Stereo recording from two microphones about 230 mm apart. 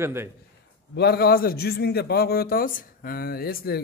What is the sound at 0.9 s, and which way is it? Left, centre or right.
A man's voice, left.